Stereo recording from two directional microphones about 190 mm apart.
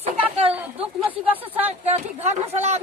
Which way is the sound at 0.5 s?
10° right (ahead or behind).